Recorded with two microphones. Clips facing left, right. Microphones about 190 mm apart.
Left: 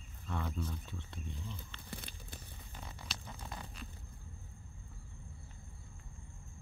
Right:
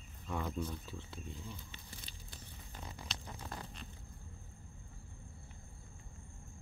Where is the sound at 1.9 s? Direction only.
60° left (ahead or behind).